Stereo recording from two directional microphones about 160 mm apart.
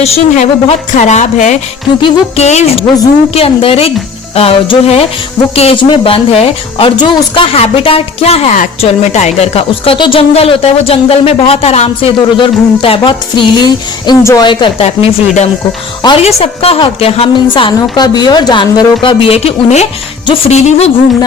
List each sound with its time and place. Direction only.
0.0 s a woman's voice: 40° left (ahead or behind)
2.0 s speech: 35° left (ahead or behind)
14.8 s a woman's voice: 45° left (ahead or behind)